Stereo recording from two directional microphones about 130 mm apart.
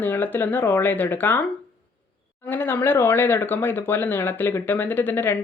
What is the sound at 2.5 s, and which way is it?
Speech, 15° left (ahead or behind).